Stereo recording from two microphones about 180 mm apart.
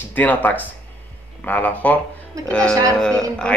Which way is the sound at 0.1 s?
10° left (ahead or behind).